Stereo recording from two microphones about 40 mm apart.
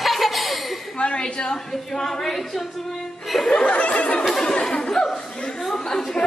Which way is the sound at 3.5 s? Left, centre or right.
Left.